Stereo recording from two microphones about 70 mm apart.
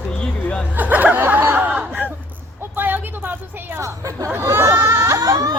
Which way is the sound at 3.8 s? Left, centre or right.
Right.